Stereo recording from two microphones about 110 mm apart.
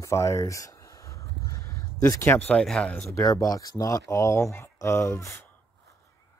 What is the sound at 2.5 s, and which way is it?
Speech, 5° left (ahead or behind).